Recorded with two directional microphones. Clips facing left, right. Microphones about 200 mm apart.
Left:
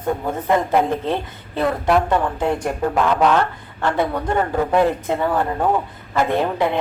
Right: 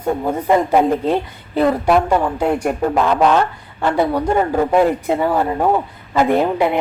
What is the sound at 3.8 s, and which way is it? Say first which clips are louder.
A man's voice: right 4 dB; 10° right (ahead or behind).